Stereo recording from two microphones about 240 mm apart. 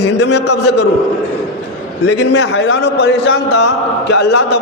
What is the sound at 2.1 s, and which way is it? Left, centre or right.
A man's voice, left.